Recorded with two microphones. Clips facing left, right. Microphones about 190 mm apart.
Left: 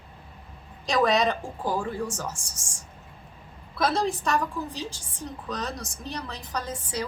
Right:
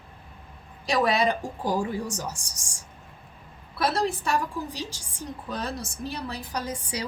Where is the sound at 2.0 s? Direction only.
35° right (ahead or behind).